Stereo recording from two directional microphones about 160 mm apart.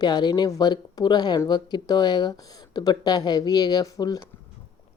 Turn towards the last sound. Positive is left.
turn(degrees=20)  # may be behind; listen again after turning